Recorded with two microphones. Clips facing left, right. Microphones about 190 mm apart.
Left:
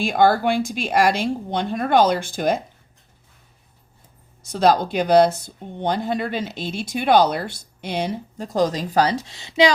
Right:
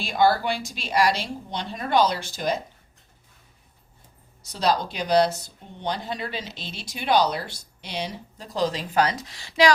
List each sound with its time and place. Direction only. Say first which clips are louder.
0.0 s speech: left 4 dB; 50° left (ahead or behind)
4.4 s speech: left 6 dB; 50° left (ahead or behind); by 9.7 s 20° left (ahead or behind)